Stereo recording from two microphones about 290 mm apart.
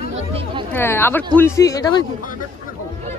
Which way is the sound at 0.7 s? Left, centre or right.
Centre.